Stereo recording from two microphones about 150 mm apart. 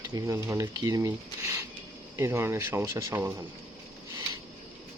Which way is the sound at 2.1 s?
15° right (ahead or behind).